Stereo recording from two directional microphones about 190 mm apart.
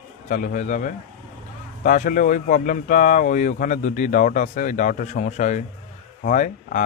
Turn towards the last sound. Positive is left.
turn(degrees=40)  # may be behind; listen again after turning